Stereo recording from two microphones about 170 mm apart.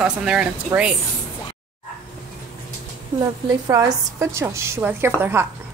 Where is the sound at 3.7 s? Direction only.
15° right (ahead or behind).